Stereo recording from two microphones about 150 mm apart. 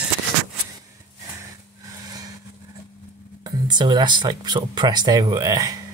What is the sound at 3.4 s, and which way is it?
Speech, 30° right (ahead or behind).